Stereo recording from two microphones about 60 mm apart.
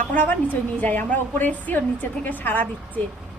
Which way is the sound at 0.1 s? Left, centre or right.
Left.